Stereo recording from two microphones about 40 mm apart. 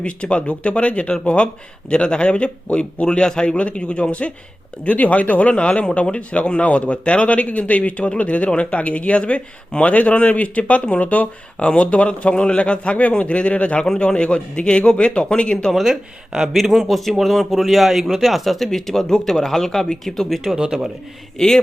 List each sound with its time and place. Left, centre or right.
0.0 s a man's voice: left
4.9 s a man's voice: left
15.8 s speech: centre
16.5 s a man's voice: centre
20.6 s speech: centre
21.3 s speech: centre